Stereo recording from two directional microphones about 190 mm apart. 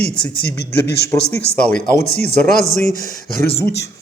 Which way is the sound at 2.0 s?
55° left (ahead or behind).